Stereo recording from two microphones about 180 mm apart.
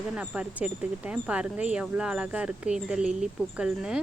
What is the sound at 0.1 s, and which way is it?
Speech, 5° right (ahead or behind).